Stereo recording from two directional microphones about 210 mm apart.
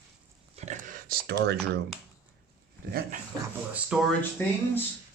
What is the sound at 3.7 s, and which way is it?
Speech, centre (ahead or behind).